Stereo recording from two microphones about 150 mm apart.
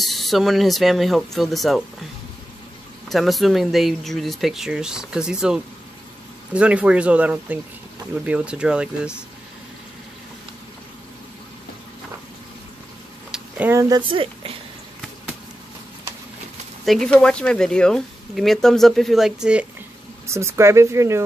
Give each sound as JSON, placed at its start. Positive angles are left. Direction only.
{"t": 0.0, "sound": "speech", "side_deg": 0}
{"t": 3.1, "sound": "speech", "side_deg": 0}
{"t": 13.3, "sound": "speech", "side_deg": -15}
{"t": 16.8, "sound": "speech", "side_deg": 0}
{"t": 20.3, "sound": "speech", "side_deg": -20}